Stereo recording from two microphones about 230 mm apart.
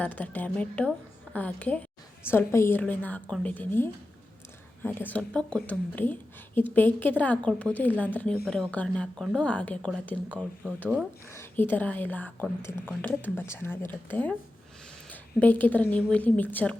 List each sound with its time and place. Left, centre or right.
0.0 s speech: centre